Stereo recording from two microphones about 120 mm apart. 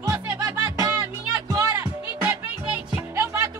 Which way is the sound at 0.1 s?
30° right (ahead or behind).